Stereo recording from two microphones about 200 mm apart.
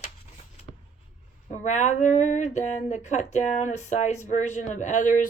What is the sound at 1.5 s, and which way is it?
Speech, 35° left (ahead or behind).